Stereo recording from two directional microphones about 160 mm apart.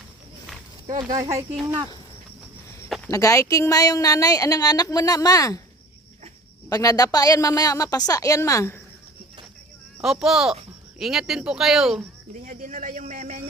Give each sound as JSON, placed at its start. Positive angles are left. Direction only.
{"t": 0.9, "sound": "speech", "side_deg": -20}
{"t": 3.1, "sound": "a woman's voice", "side_deg": 20}
{"t": 6.7, "sound": "a woman's voice", "side_deg": 25}
{"t": 10.0, "sound": "speech", "side_deg": -5}
{"t": 12.5, "sound": "a man's voice", "side_deg": -55}